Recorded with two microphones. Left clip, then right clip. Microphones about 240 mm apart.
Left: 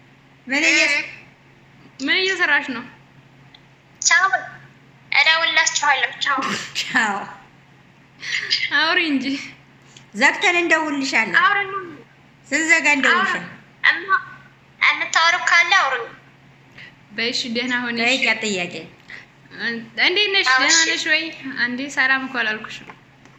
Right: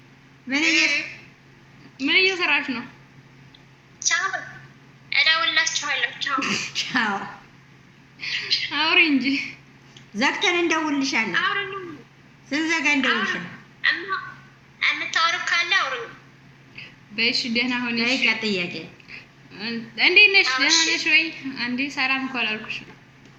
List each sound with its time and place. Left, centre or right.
0.6 s speech: left
2.0 s a sound: left
2.3 s a woman's voice: centre
4.0 s a sound: left
6.4 s a woman's voice: centre
8.4 s a sound: left
8.7 s a woman's voice: centre
11.3 s speech: left
12.5 s a woman's voice: centre
13.0 s speech: left
13.8 s a sound: left
16.7 s a woman's voice: centre
20.5 s speech: left
20.9 s a woman's voice: centre